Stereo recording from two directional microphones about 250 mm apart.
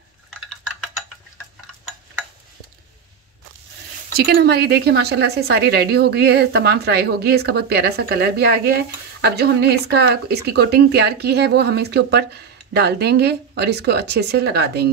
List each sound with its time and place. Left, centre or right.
4.1 s speech: right